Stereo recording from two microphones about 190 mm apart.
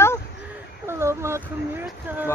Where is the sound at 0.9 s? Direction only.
15° right (ahead or behind).